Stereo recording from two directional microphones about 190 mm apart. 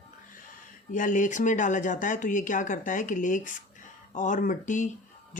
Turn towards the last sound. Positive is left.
turn(degrees=40)  # may be behind; listen again after turning